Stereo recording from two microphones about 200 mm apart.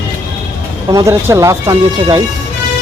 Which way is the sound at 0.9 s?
15° right (ahead or behind).